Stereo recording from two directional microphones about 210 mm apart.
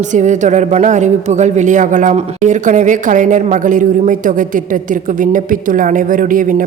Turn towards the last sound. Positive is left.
turn(degrees=-40)  # may be behind; listen again after turning